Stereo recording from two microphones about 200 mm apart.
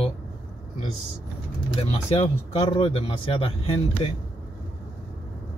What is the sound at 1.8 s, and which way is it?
Speech, 30° left (ahead or behind).